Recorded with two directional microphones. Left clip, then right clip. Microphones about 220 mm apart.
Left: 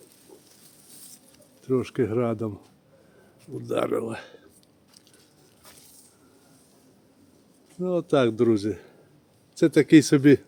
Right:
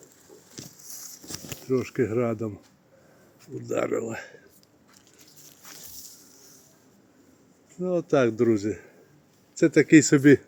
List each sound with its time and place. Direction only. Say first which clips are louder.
1.6 s speech: left 1 dB; 15° left (ahead or behind)
3.7 s speech: left 1 dB; 20° left (ahead or behind)
7.8 s speech: even; 10° left (ahead or behind)